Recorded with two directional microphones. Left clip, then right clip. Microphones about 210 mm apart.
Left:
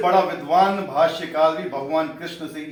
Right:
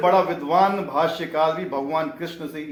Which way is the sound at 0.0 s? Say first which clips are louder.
Even; 45° right (ahead or behind).